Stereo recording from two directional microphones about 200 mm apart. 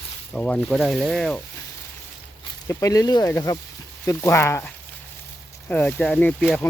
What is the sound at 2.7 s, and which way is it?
Speech, 15° left (ahead or behind).